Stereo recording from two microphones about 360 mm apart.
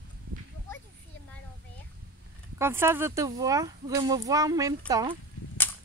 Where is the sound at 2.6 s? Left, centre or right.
Centre.